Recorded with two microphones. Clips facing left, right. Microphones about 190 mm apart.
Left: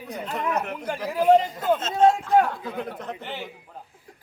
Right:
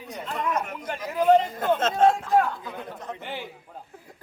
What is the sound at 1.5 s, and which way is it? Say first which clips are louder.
Speech: even; 55° right (ahead or behind).